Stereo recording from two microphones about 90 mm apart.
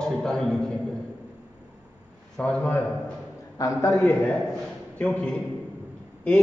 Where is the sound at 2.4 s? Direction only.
15° left (ahead or behind).